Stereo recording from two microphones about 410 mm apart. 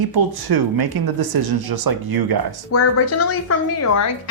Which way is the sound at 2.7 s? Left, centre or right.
Left.